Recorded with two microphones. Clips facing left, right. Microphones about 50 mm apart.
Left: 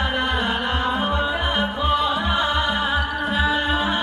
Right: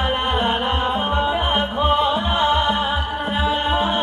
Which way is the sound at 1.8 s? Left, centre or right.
Right.